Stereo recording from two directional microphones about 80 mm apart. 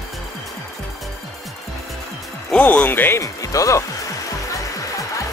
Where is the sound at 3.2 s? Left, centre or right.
Left.